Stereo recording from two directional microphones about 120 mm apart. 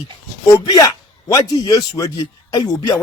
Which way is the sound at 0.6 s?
30° left (ahead or behind).